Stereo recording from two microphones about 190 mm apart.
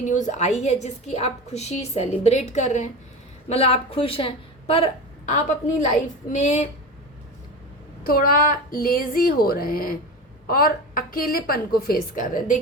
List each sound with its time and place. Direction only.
0.0 s a woman's voice: 40° left (ahead or behind)
8.0 s a woman's voice: 50° left (ahead or behind)